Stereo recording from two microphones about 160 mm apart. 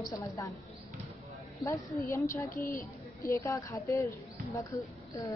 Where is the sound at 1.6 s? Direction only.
20° left (ahead or behind).